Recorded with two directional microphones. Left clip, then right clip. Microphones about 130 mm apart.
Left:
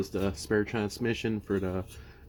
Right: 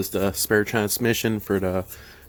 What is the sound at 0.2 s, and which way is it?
Speech, 30° right (ahead or behind).